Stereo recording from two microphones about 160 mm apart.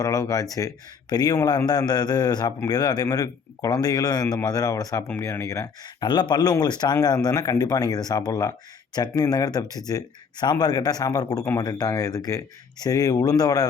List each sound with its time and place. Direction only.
0.0 s a man's voice: 20° left (ahead or behind)